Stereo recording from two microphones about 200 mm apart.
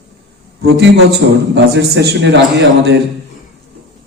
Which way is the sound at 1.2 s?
65° right (ahead or behind).